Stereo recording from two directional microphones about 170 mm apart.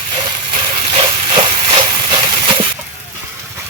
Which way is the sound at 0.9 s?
30° right (ahead or behind).